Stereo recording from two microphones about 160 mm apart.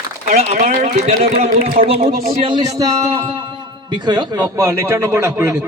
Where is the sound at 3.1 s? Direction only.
35° right (ahead or behind).